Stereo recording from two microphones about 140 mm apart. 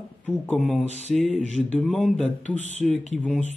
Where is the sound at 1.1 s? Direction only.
5° left (ahead or behind).